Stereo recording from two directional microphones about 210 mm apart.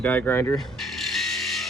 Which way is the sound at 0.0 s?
10° left (ahead or behind).